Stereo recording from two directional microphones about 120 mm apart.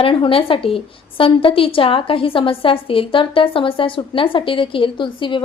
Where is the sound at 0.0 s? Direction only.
50° left (ahead or behind).